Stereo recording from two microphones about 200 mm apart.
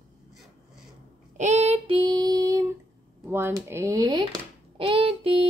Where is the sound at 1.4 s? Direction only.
35° right (ahead or behind).